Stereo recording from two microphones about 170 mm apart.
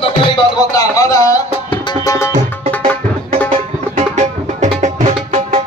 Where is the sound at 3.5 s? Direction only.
40° right (ahead or behind).